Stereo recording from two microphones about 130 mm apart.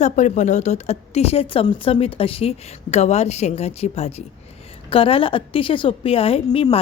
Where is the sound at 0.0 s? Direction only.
65° left (ahead or behind).